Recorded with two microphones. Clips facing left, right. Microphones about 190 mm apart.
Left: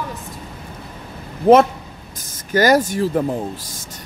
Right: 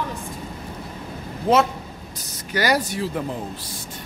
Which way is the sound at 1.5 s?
65° left (ahead or behind).